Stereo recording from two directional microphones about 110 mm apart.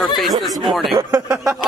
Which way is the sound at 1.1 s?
30° right (ahead or behind).